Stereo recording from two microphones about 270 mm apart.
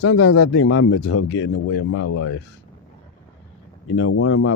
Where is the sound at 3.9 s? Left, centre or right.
Left.